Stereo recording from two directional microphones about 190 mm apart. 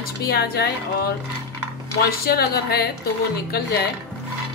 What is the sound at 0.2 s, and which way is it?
A woman's voice, 55° left (ahead or behind).